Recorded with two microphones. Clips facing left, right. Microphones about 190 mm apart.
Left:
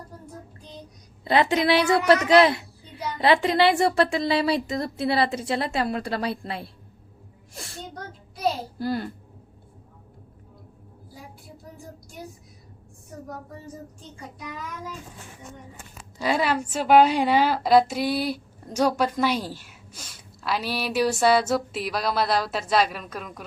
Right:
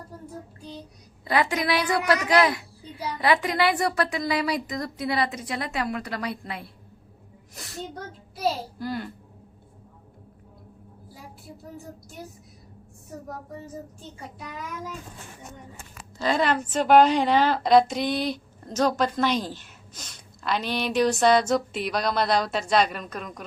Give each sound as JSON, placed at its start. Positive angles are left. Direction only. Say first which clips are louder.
{"t": 1.2, "sound": "speech", "louder": "left 4 dB", "side_deg": 25}
{"t": 8.8, "sound": "speech", "louder": "left 5 dB", "side_deg": 35}
{"t": 16.1, "sound": "a woman's voice", "louder": "even", "side_deg": 10}